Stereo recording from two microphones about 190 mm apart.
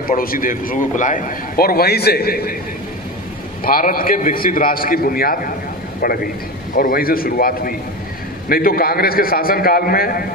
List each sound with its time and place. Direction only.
0.0 s a man's voice: 50° left (ahead or behind)
3.6 s a man's voice: 50° left (ahead or behind)